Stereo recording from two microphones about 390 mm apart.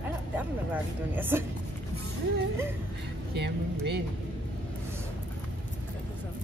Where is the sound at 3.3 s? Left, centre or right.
Right.